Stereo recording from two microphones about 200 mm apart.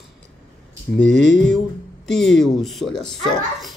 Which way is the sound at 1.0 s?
65° left (ahead or behind).